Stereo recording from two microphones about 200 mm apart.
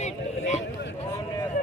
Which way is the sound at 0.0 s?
35° left (ahead or behind).